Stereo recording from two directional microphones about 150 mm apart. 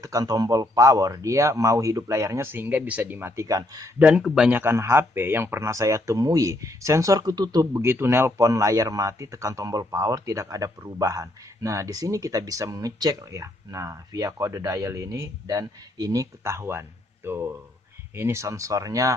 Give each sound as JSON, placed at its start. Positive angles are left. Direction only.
{"t": 0.0, "sound": "a man's voice", "side_deg": -25}
{"t": 4.0, "sound": "a man's voice", "side_deg": -5}